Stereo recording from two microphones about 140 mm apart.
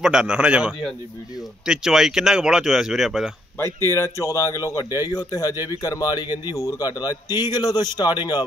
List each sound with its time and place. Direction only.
0.0 s a man's voice: 5° right (ahead or behind)
3.8 s speech: 20° left (ahead or behind)